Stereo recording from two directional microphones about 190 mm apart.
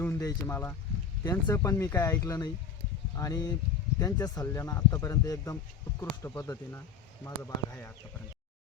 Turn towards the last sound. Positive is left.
turn(degrees=10)  # may be behind; listen again after turning